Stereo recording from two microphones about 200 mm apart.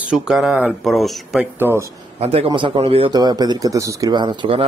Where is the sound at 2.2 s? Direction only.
30° right (ahead or behind).